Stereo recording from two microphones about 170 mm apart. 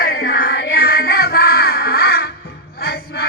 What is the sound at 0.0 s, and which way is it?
Music, 60° left (ahead or behind).